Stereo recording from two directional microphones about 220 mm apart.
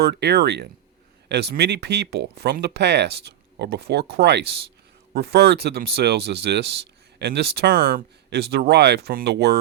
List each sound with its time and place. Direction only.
0.0 s speech: 50° right (ahead or behind)